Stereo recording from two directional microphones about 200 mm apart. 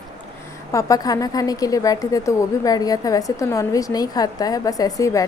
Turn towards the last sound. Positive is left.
turn(degrees=15)  # may be behind; listen again after turning